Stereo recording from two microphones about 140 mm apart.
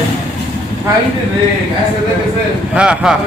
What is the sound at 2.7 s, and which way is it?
Speech, 5° right (ahead or behind).